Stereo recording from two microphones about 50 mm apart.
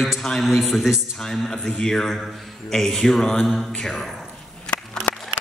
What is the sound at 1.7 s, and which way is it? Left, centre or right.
A man's voice, centre.